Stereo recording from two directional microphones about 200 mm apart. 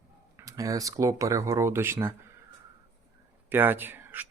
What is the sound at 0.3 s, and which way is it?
Speech, 15° right (ahead or behind).